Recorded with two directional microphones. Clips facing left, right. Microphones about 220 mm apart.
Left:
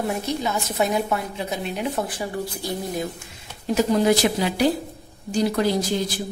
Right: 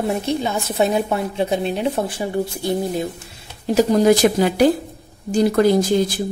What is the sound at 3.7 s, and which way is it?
Speech, 40° right (ahead or behind).